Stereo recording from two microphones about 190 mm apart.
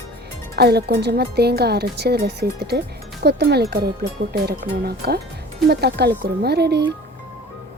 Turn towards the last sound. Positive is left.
turn(degrees=-60)  # may be behind; listen again after turning